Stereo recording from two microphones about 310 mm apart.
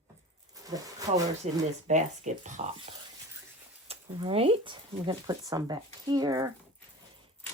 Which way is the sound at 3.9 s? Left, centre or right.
Centre.